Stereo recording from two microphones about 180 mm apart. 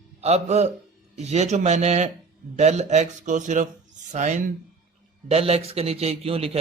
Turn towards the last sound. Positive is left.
turn(degrees=-35)  # may be behind; listen again after turning